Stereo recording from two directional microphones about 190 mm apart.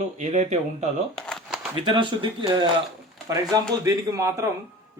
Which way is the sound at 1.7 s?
25° right (ahead or behind).